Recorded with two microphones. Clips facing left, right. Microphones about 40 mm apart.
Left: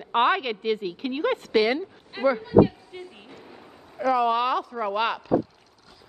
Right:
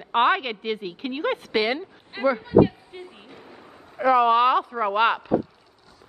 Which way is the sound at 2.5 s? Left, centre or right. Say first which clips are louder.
Right 1 dB; centre.